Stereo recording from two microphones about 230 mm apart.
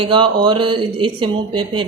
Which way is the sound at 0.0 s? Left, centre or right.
Right.